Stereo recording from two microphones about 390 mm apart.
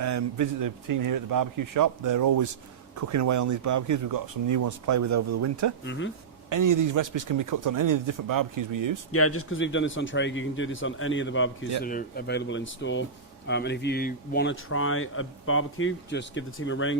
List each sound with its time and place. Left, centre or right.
0.0 s speech: right
5.8 s speech: left
6.5 s speech: right
9.1 s speech: left